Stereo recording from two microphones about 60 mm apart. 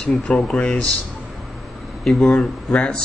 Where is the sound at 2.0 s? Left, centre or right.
Centre.